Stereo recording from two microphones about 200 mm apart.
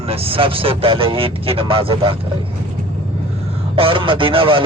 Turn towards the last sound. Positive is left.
turn(degrees=-25)  # may be behind; listen again after turning